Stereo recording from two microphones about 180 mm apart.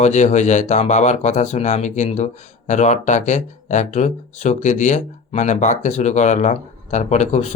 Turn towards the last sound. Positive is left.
turn(degrees=40)  # may be behind; listen again after turning